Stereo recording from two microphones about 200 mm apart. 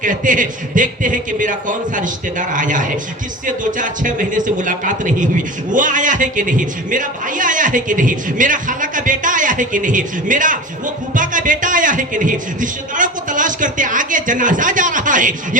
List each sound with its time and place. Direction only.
0.0 s a man's voice: 40° right (ahead or behind)